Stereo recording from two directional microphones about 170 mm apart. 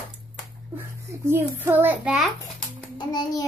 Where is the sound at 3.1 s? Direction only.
25° left (ahead or behind).